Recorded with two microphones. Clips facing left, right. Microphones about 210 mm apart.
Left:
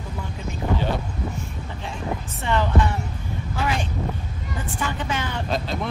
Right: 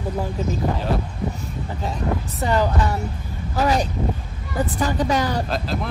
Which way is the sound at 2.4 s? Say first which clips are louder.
Right 1 dB; 40° right (ahead or behind).